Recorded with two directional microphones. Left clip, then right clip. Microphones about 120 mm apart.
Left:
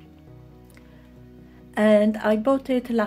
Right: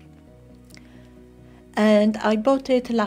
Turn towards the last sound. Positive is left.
turn(degrees=-40)  # may be behind; listen again after turning